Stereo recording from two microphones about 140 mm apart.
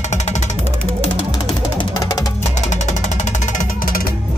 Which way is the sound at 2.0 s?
25° left (ahead or behind).